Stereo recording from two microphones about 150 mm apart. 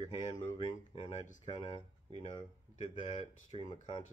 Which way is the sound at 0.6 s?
40° left (ahead or behind).